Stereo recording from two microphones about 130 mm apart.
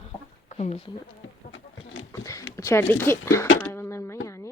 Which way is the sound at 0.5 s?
55° left (ahead or behind).